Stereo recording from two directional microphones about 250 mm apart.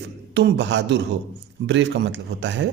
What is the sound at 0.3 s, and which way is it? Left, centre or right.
A man's voice, right.